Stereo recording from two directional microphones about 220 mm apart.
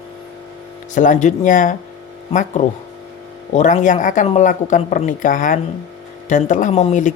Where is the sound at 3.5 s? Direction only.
35° left (ahead or behind).